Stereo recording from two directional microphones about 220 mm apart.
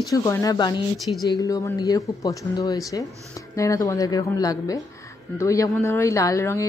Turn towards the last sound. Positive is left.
turn(degrees=15)  # may be behind; listen again after turning